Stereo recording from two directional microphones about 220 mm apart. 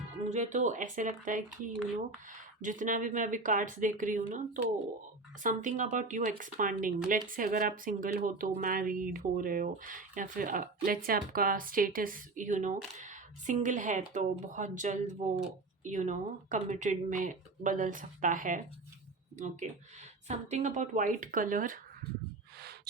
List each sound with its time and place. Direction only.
0.3 s speech: 35° right (ahead or behind)
2.6 s speech: 35° right (ahead or behind)
20.2 s speech: 30° right (ahead or behind)